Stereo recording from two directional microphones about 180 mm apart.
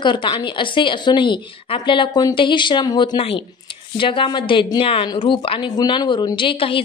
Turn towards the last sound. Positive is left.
turn(degrees=30)  # may be behind; listen again after turning